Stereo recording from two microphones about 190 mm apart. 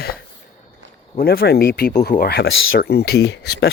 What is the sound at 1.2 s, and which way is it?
Speech, 55° left (ahead or behind).